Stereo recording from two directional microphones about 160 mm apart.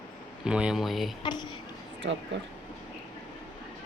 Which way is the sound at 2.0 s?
90° right.